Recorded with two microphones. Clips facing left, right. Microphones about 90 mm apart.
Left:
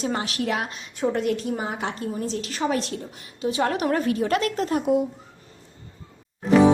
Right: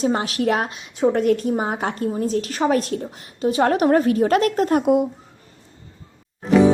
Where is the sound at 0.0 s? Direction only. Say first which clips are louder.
Right 6 dB; 35° right (ahead or behind); by 5.0 s 55° right (ahead or behind).